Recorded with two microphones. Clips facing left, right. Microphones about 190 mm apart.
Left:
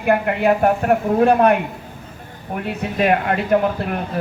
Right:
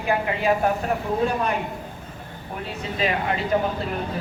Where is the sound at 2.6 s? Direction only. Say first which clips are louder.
Left 6 dB; 60° left (ahead or behind).